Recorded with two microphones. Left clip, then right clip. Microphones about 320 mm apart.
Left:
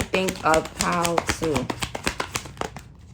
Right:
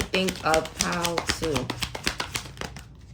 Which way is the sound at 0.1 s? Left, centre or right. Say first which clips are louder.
Left 3 dB; centre.